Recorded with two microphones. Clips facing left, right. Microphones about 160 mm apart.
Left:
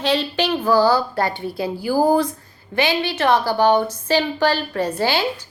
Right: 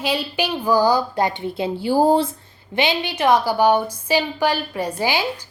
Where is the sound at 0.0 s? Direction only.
10° right (ahead or behind).